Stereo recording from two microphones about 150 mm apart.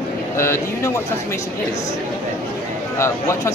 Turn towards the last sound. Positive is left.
turn(degrees=20)  # may be behind; listen again after turning